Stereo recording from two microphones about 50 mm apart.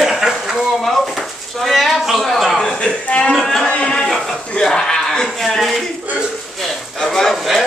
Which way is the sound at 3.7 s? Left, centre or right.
Centre.